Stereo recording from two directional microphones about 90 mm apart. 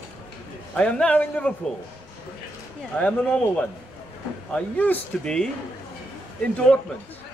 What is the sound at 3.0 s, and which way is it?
Speech, 15° left (ahead or behind).